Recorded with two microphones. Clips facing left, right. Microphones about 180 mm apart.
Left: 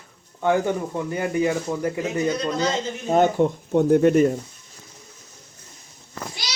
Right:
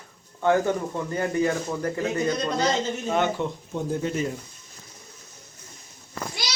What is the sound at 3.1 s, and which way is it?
Speech, 45° left (ahead or behind).